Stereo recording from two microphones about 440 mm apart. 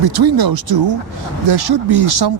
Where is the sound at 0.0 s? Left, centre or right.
Right.